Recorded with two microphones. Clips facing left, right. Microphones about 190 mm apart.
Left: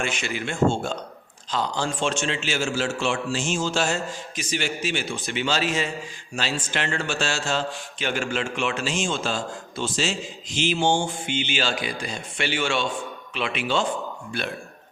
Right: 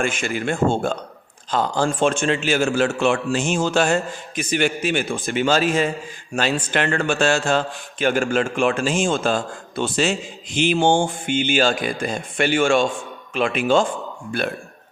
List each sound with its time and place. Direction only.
0.0 s a man's voice: 50° right (ahead or behind)